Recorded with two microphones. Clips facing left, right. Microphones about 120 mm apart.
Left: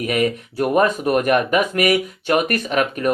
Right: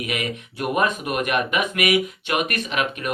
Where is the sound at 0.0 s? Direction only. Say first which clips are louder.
Left 8 dB; 40° left (ahead or behind).